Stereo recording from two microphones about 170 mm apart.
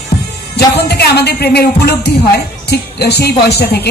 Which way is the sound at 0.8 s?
70° left (ahead or behind).